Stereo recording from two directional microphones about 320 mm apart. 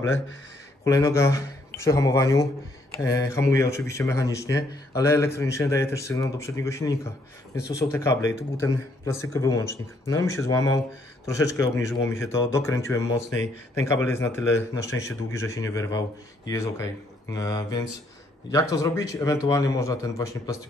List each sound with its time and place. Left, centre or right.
0.0 s speech: left
0.8 s speech: centre